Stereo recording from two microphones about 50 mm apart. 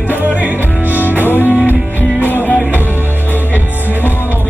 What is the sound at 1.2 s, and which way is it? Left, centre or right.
Music, left.